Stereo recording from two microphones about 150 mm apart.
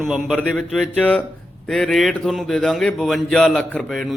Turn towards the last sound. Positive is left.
turn(degrees=0)  # may be behind; listen again after turning